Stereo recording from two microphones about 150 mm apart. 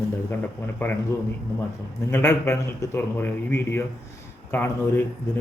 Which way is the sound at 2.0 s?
15° left (ahead or behind).